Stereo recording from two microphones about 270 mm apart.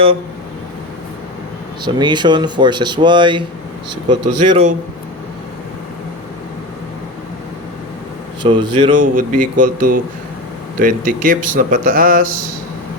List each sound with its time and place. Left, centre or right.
1.8 s speech: centre
8.4 s speech: centre
9.0 s speech: right